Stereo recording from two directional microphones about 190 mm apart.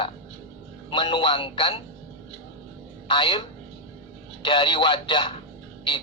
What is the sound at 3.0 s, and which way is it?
Speech, 25° left (ahead or behind).